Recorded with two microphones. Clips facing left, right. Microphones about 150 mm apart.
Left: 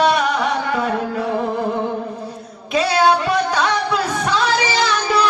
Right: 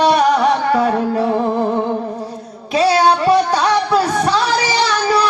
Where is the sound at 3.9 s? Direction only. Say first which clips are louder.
Right 5 dB; 40° right (ahead or behind).